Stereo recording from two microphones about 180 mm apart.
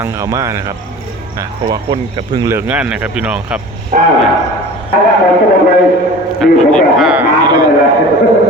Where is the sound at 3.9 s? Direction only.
45° right (ahead or behind).